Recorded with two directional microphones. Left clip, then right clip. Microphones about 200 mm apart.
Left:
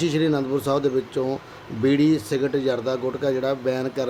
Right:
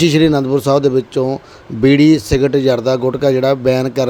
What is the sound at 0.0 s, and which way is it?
A man's voice, 40° right (ahead or behind).